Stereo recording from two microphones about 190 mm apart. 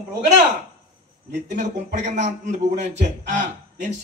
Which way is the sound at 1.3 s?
40° right (ahead or behind).